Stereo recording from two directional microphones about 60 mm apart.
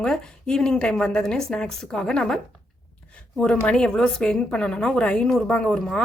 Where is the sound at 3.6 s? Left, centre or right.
Centre.